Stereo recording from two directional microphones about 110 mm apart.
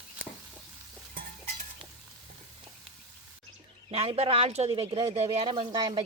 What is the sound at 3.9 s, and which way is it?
Speech, 65° right (ahead or behind).